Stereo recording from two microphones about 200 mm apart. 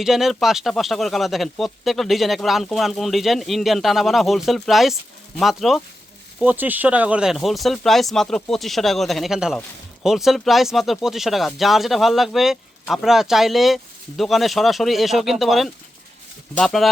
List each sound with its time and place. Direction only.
0.0 s speech: centre (ahead or behind)